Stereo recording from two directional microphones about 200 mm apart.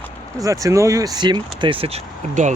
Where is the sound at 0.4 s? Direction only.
15° right (ahead or behind).